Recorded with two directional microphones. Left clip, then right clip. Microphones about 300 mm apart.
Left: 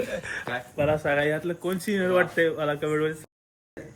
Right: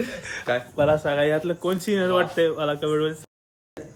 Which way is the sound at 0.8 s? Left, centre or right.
Centre.